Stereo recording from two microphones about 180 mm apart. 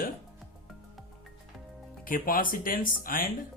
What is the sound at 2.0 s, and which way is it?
Speech, 50° left (ahead or behind).